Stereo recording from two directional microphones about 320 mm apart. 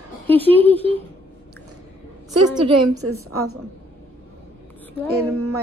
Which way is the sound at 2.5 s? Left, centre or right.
Centre.